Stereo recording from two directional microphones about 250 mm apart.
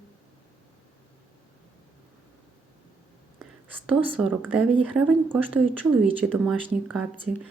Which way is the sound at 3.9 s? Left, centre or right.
Centre.